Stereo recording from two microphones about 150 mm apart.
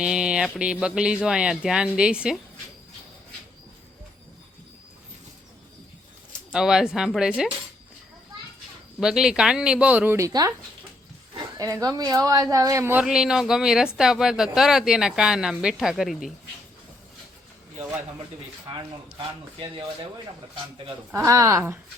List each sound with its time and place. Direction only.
0.0 s speech: 5° right (ahead or behind)
6.5 s speech: 5° right (ahead or behind)
9.0 s speech: 5° right (ahead or behind)
19.1 s speech: 35° right (ahead or behind)
21.1 s speech: 20° right (ahead or behind)